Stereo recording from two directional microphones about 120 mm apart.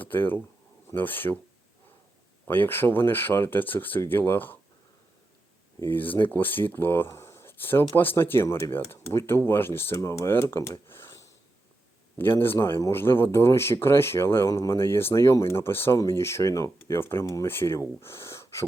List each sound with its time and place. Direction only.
0.0 s speech: 15° left (ahead or behind)
2.5 s speech: 15° left (ahead or behind)
5.8 s speech: 15° left (ahead or behind)
12.4 s speech: 20° left (ahead or behind)